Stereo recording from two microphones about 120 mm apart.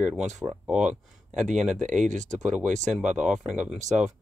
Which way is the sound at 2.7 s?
80° right.